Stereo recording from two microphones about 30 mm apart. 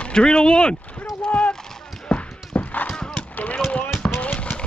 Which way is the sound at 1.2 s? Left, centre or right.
Left.